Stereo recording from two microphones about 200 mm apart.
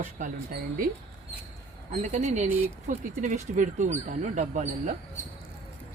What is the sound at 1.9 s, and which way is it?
Speech, 35° right (ahead or behind).